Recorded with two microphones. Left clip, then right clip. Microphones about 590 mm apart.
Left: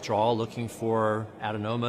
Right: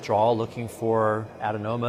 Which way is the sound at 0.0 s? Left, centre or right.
Right.